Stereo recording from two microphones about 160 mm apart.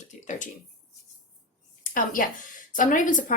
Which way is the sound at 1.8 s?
60° left (ahead or behind).